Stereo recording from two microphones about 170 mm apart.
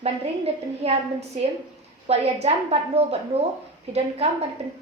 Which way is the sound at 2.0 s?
35° right (ahead or behind).